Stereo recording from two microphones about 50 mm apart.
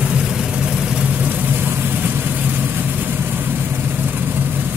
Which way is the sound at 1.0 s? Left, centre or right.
Right.